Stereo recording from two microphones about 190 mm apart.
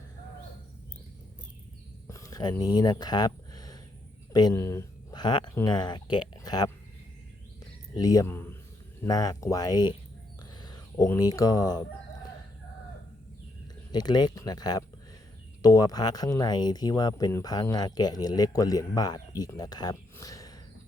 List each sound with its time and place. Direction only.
2.0 s a sound: 15° left (ahead or behind)
2.7 s speech: 20° left (ahead or behind)
7.9 s speech: 20° left (ahead or behind)
13.9 s speech: 20° left (ahead or behind)